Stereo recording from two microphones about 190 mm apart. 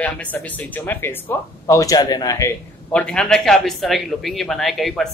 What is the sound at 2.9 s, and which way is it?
A man's voice, 5° left (ahead or behind).